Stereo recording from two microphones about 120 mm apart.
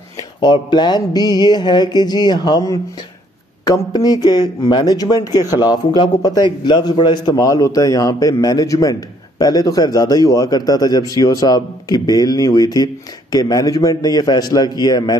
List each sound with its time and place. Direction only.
0.4 s a man's voice: 40° left (ahead or behind)
3.6 s a man's voice: 30° left (ahead or behind)
7.3 s a man's voice: 25° left (ahead or behind)